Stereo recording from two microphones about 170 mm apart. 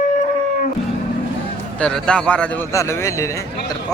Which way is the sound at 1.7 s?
5° left (ahead or behind).